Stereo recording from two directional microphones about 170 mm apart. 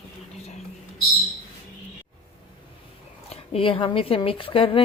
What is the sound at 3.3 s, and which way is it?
Speech, 35° left (ahead or behind).